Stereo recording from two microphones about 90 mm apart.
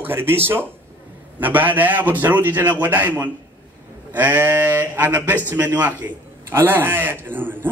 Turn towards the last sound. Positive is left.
turn(degrees=-20)  # may be behind; listen again after turning